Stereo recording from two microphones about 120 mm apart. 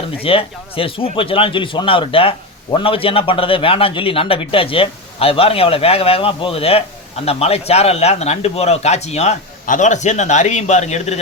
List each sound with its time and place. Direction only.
0.2 s a man's voice: 50° left (ahead or behind); by 11.2 s 70° left (ahead or behind)